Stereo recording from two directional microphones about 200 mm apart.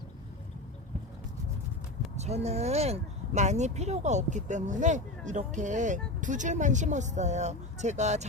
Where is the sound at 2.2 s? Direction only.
30° right (ahead or behind).